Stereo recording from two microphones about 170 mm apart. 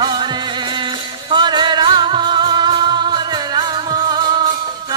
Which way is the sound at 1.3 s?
25° right (ahead or behind).